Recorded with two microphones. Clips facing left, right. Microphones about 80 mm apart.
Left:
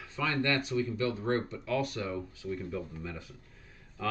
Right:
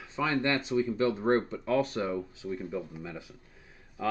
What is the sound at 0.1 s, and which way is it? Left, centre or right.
Speech, right.